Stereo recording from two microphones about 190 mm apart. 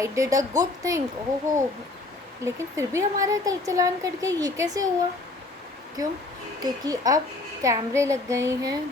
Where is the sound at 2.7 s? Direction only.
15° right (ahead or behind).